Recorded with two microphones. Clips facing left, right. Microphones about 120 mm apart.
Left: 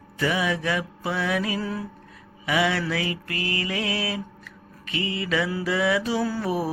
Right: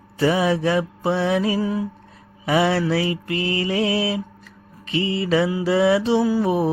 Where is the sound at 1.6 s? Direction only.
15° right (ahead or behind).